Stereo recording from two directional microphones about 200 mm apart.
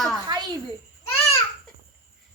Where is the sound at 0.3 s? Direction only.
20° right (ahead or behind).